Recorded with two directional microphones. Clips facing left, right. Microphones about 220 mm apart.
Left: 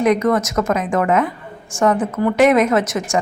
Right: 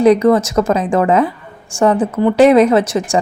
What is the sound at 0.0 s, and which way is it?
Speech, 30° right (ahead or behind).